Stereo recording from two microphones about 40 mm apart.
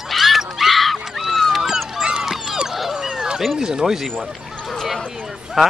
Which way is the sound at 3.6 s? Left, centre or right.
Centre.